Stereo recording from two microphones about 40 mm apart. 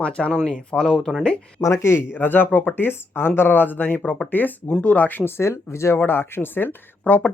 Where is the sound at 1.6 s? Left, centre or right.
Left.